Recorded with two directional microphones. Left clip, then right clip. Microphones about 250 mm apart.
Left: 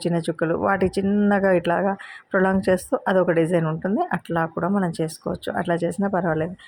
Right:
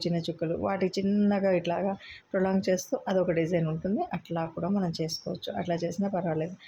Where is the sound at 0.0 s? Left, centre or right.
Centre.